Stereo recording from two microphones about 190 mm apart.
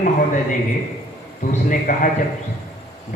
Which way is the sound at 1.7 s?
45° left (ahead or behind).